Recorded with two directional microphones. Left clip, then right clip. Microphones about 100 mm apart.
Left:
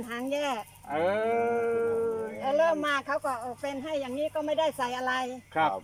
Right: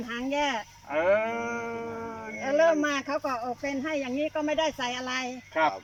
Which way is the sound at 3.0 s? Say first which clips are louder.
Even; 10° left (ahead or behind).